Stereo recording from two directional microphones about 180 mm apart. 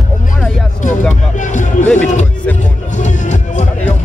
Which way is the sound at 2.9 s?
45° left (ahead or behind).